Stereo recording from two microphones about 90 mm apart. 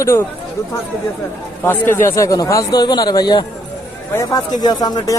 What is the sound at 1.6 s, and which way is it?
Speech, 25° left (ahead or behind).